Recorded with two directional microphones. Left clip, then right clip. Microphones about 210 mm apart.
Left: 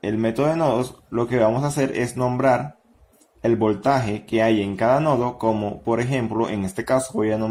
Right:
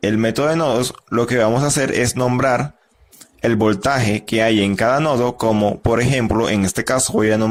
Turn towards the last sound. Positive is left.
turn(degrees=-35)  # may be behind; listen again after turning